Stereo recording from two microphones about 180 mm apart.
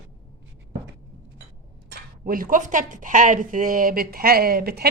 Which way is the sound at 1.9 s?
55° right (ahead or behind).